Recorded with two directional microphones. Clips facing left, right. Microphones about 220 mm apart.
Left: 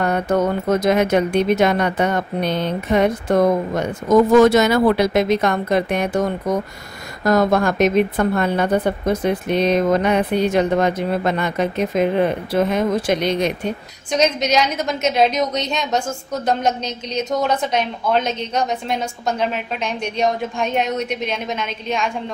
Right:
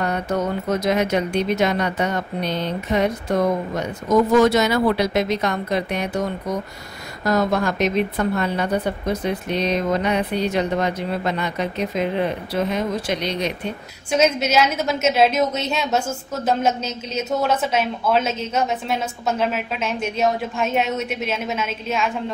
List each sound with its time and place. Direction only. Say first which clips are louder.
0.0 s speech: left 4 dB; 50° left (ahead or behind)
14.1 s a woman's voice: even; 5° right (ahead or behind)